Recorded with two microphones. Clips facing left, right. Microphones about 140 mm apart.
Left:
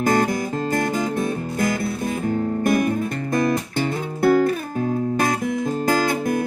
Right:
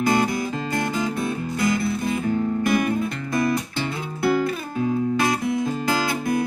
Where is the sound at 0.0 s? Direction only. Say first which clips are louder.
Left 1 dB; 45° left (ahead or behind).